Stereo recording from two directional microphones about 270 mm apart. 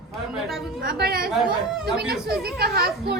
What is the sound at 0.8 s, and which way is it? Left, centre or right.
Speech, right.